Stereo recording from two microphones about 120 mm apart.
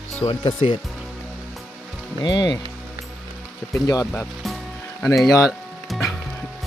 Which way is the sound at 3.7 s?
30° left (ahead or behind).